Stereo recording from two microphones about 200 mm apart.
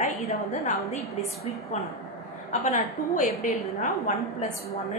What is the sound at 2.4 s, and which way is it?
A woman's voice, 40° left (ahead or behind).